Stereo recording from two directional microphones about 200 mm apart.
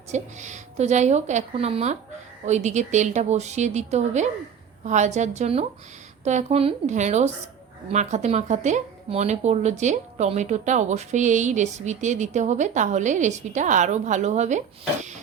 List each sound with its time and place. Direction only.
0.1 s speech: 35° right (ahead or behind)